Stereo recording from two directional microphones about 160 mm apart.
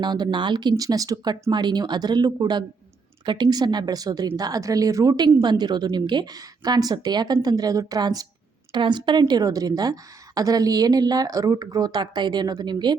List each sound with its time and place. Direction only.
0.0 s a woman's voice: 25° right (ahead or behind)